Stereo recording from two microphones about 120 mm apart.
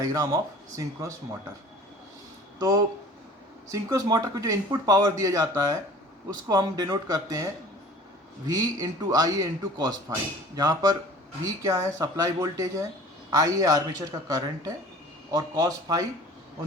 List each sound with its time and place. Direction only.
0.0 s speech: 30° right (ahead or behind)
2.6 s a man's voice: 30° right (ahead or behind)